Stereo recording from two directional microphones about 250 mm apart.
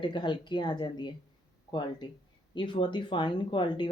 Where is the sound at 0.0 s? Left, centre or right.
Centre.